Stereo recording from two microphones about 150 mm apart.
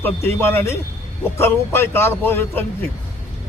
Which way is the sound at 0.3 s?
15° left (ahead or behind).